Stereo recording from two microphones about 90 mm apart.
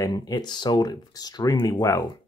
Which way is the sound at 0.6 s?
55° left (ahead or behind).